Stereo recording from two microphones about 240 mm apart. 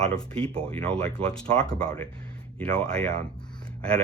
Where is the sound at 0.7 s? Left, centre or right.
Centre.